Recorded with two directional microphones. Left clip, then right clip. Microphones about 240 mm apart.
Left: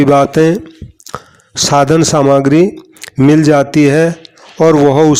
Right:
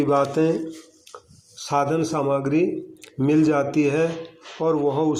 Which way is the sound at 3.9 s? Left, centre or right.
Left.